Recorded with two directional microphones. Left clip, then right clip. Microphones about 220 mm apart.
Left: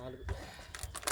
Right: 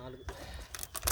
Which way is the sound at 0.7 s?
50° right (ahead or behind).